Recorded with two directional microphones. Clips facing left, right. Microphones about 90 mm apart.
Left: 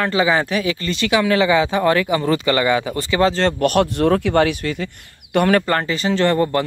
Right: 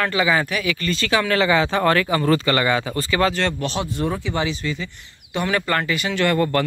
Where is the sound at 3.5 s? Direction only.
60° left (ahead or behind).